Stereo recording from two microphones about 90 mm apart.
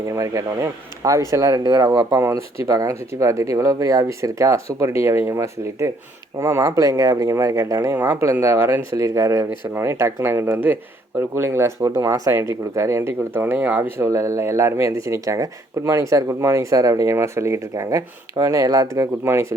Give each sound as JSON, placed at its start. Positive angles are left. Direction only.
{"t": 0.1, "sound": "speech", "side_deg": -35}
{"t": 1.6, "sound": "speech", "side_deg": -45}
{"t": 7.9, "sound": "speech", "side_deg": -20}
{"t": 8.2, "sound": "speech", "side_deg": -35}
{"t": 8.9, "sound": "speech", "side_deg": -35}
{"t": 14.0, "sound": "speech", "side_deg": -35}
{"t": 19.2, "sound": "speech", "side_deg": -30}